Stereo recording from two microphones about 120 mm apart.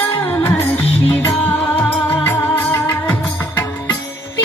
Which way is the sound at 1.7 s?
15° left (ahead or behind).